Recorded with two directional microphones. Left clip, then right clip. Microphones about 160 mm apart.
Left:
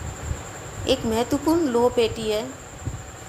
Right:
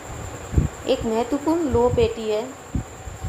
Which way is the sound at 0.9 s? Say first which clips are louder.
Even; 45° left (ahead or behind).